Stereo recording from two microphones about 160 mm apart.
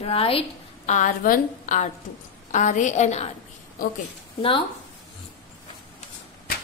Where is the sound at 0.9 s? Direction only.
55° left (ahead or behind).